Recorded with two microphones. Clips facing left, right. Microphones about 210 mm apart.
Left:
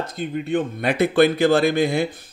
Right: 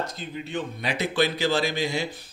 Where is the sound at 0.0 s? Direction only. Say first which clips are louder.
Left 6 dB; 55° left (ahead or behind).